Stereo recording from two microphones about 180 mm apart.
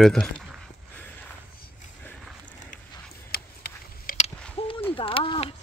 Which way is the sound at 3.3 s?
60° left (ahead or behind).